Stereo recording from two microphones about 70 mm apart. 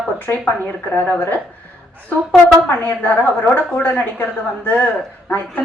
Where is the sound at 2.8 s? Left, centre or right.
Left.